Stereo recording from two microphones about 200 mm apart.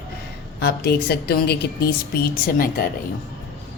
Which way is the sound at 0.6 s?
50° left (ahead or behind).